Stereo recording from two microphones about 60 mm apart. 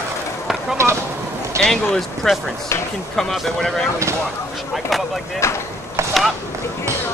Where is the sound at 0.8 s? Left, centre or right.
Right.